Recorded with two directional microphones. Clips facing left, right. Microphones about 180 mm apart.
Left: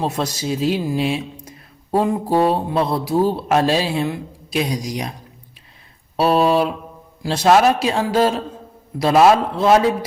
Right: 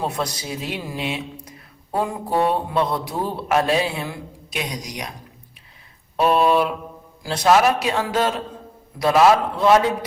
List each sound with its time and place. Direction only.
0.0 s speech: 25° left (ahead or behind)
6.1 s mantra: 35° left (ahead or behind)
7.2 s speech: 25° left (ahead or behind)